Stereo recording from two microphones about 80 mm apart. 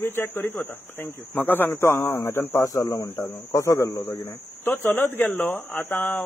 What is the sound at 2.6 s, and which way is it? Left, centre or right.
A man's voice, left.